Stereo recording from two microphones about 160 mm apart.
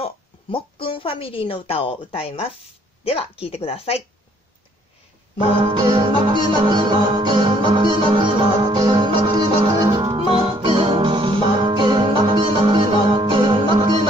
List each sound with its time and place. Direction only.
0.0 s a woman's voice: 35° left (ahead or behind)
5.8 s music: 25° right (ahead or behind)